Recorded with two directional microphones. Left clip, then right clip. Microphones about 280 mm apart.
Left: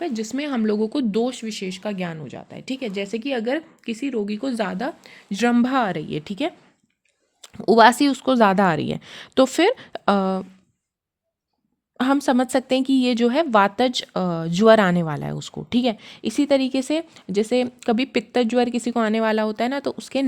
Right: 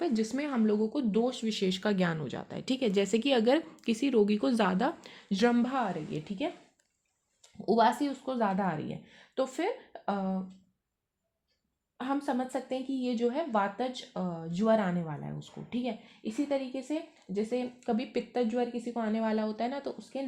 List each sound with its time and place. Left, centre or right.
0.2 s speech: left
1.5 s speech: centre
5.3 s speech: left
5.5 s a woman's voice: left
11.9 s speech: left